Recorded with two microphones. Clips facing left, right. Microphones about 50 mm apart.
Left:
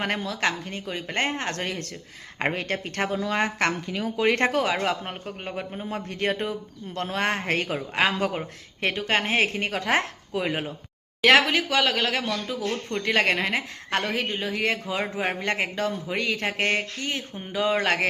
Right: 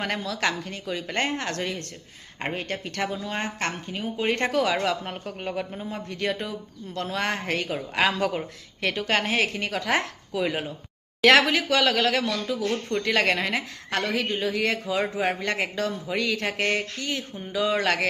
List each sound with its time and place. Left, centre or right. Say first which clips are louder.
0.0 s speech: left 1 dB; left
2.4 s speech: left 3 dB; left
3.1 s speech: left 5 dB; left
4.4 s speech: left 1 dB; left
4.6 s speech: right 1 dB; centre
5.2 s speech: right 2 dB; centre
5.8 s speech: left 5 dB; left
7.8 s speech: right 3 dB; centre
11.2 s speech: even; centre; by 14.3 s left
14.3 s speech: right 1 dB; centre